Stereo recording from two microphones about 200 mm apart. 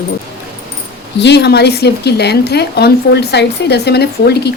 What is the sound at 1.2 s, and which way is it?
A woman's voice, 55° left (ahead or behind).